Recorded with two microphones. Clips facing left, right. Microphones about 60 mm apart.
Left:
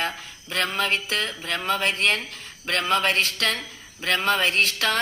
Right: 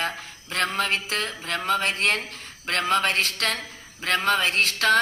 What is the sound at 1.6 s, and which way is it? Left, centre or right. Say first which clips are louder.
Speech: even; left.